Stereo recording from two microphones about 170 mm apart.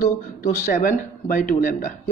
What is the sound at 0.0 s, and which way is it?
A man's voice, 50° left (ahead or behind).